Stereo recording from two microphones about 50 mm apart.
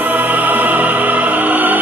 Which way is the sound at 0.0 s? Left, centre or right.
Right.